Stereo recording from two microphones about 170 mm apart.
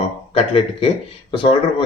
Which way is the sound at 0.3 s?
35° left (ahead or behind).